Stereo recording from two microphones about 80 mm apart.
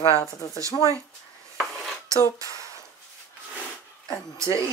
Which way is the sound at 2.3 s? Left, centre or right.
Right.